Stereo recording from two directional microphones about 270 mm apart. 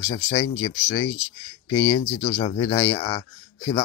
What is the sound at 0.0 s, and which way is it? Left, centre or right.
Speech, left.